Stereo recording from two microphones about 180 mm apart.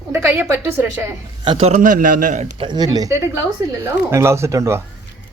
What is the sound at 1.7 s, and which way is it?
Speech, 50° right (ahead or behind).